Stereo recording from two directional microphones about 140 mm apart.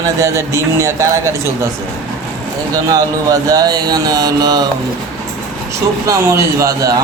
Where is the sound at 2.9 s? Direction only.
25° right (ahead or behind).